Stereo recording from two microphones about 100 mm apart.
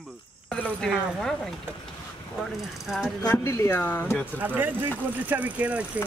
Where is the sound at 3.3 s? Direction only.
25° left (ahead or behind).